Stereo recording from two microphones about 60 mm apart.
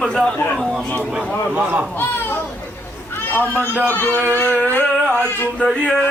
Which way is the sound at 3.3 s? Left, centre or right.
Left.